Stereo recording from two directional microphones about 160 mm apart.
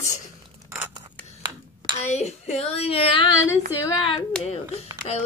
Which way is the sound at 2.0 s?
45° left (ahead or behind).